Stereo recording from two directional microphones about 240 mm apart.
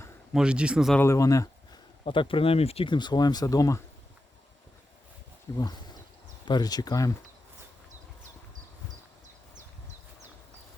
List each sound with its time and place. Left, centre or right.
0.3 s speech: centre
1.0 s speech: centre
5.5 s speech: centre